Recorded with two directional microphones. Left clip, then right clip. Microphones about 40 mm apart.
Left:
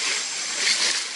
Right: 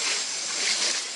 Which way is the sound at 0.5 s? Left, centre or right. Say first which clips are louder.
Left 4 dB; left.